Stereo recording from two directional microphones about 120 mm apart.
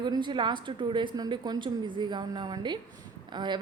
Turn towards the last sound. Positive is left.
turn(degrees=-40)  # may be behind; listen again after turning